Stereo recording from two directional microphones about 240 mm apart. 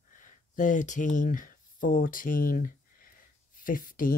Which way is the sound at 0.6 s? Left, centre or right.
Left.